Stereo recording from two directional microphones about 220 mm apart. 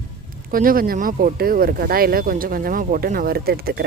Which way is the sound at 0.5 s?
40° right (ahead or behind).